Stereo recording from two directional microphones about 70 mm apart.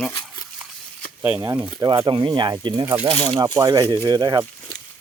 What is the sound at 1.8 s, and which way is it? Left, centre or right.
Speech, right.